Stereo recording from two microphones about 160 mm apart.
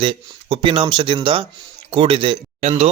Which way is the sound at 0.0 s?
35° right (ahead or behind).